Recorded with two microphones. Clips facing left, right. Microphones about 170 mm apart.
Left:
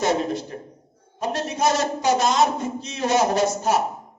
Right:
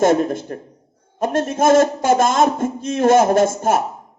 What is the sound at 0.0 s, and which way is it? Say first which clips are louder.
A woman's voice: right 7 dB; 50° right (ahead or behind).